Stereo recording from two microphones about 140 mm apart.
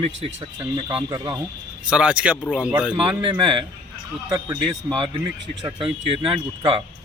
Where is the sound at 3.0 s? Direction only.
35° right (ahead or behind).